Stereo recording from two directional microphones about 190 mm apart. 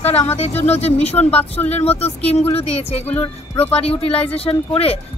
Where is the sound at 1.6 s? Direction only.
35° left (ahead or behind).